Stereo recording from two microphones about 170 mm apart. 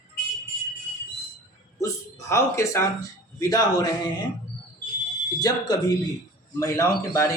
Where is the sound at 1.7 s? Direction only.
20° left (ahead or behind).